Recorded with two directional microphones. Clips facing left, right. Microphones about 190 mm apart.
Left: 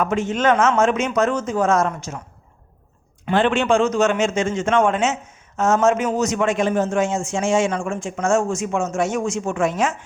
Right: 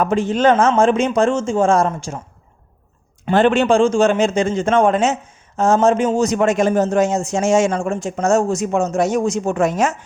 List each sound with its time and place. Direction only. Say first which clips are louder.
0.0 s a man's voice: right 4 dB; 35° right (ahead or behind)
3.2 s a man's voice: right 4 dB; 40° right (ahead or behind)